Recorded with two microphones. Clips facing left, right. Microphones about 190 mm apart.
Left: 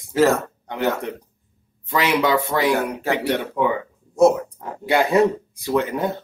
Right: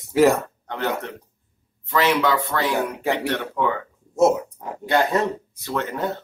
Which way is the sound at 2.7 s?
15° right (ahead or behind).